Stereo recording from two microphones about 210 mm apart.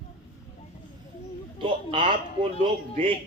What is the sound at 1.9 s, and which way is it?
Speech, 25° right (ahead or behind).